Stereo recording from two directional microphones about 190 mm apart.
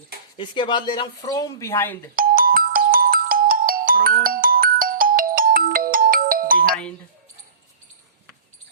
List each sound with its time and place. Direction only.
0.3 s speech: 25° left (ahead or behind)
2.1 s ringtone: 50° right (ahead or behind)